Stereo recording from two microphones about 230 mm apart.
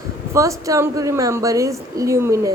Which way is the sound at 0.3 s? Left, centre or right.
Centre.